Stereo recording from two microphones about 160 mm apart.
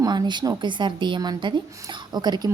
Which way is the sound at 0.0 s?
25° right (ahead or behind).